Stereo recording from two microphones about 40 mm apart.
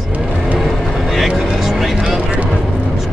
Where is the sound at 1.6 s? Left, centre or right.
Centre.